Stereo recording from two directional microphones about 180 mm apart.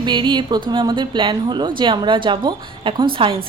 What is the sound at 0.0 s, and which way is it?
A woman's voice, 25° right (ahead or behind).